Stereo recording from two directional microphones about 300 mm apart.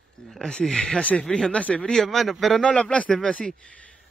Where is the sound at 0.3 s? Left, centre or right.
Centre.